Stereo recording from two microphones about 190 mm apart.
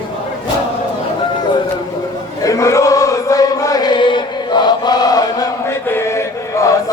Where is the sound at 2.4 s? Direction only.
15° left (ahead or behind).